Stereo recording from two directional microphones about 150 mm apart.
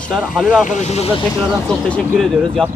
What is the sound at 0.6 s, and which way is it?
Speech, 50° left (ahead or behind).